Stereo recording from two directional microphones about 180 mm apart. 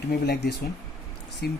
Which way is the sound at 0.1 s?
60° left (ahead or behind).